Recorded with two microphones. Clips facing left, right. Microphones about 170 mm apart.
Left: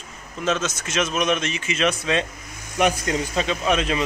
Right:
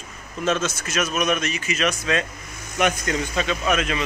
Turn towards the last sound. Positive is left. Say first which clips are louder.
# left 1 dB
turn(degrees=30)  # may be behind; listen again after turning